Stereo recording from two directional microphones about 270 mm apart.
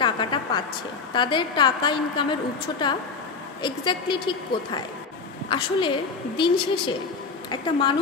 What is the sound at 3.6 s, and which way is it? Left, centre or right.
A woman's voice, centre.